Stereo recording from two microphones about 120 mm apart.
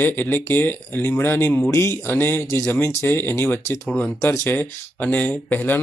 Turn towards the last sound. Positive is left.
turn(degrees=15)  # may be behind; listen again after turning